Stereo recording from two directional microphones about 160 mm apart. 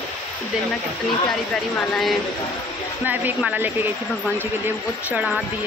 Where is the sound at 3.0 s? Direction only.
10° right (ahead or behind).